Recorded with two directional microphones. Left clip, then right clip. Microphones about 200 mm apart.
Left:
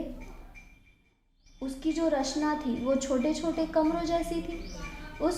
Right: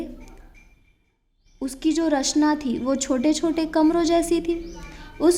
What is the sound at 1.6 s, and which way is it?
A woman's voice, 45° right (ahead or behind).